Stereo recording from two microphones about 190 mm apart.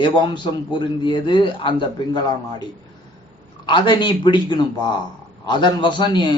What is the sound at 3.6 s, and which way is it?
Speech, 25° left (ahead or behind).